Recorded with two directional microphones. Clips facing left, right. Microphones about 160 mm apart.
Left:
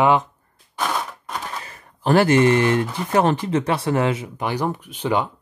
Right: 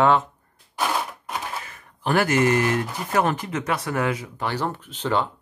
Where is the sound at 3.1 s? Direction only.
30° left (ahead or behind).